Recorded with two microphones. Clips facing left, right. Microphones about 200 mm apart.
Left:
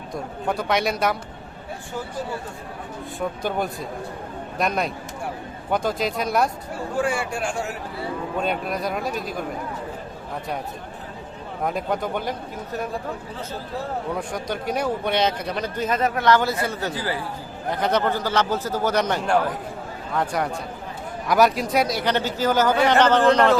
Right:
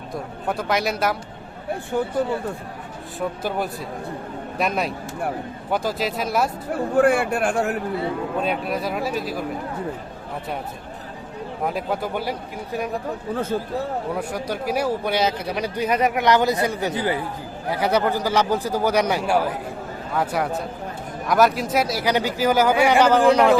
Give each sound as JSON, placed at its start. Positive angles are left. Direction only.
{"t": 0.4, "sound": "speech", "side_deg": 0}
{"t": 3.2, "sound": "speech", "side_deg": -5}
{"t": 6.9, "sound": "a man's voice", "side_deg": -60}
{"t": 8.4, "sound": "speech", "side_deg": 0}
{"t": 11.6, "sound": "a man's voice", "side_deg": -5}
{"t": 13.3, "sound": "a man's voice", "side_deg": -55}
{"t": 14.2, "sound": "a man's voice", "side_deg": -5}
{"t": 17.7, "sound": "a man's voice", "side_deg": -10}